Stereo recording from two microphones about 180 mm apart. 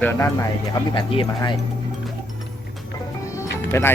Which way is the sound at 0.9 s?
25° left (ahead or behind).